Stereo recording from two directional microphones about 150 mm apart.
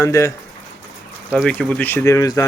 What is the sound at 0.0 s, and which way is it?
Speech, 20° left (ahead or behind).